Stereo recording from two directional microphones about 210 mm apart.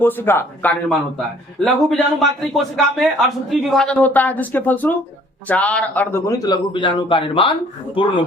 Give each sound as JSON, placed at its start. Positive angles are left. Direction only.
{"t": 0.0, "sound": "a man's voice", "side_deg": 10}